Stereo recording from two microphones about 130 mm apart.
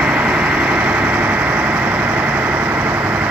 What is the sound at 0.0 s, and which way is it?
Vehicle, 10° right (ahead or behind).